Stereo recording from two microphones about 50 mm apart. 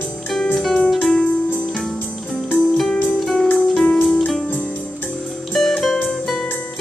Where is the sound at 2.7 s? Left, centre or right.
Centre.